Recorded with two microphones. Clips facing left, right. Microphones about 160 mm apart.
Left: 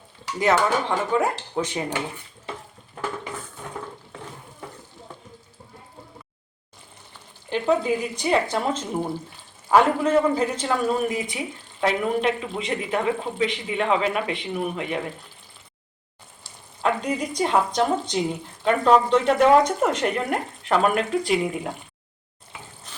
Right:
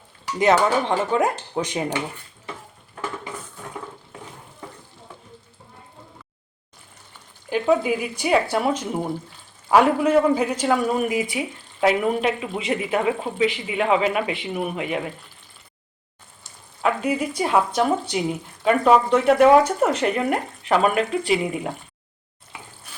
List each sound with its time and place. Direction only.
0.3 s speech: 20° right (ahead or behind)
7.5 s a man's voice: 10° right (ahead or behind)
16.8 s a man's voice: 5° right (ahead or behind)
22.9 s trickle: 10° right (ahead or behind)